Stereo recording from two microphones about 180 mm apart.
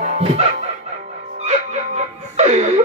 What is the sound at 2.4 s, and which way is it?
Music, 40° right (ahead or behind).